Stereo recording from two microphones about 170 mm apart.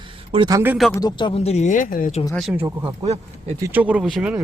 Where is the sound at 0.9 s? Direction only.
25° left (ahead or behind); by 2.2 s 50° left (ahead or behind).